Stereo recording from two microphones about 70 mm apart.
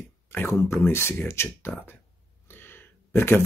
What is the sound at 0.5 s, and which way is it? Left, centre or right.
Speech, left.